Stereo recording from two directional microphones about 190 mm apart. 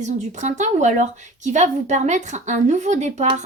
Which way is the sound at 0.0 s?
40° right (ahead or behind).